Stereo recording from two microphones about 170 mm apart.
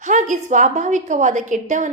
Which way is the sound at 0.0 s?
45° right (ahead or behind).